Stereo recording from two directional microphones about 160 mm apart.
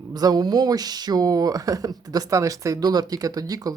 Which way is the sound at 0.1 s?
25° right (ahead or behind).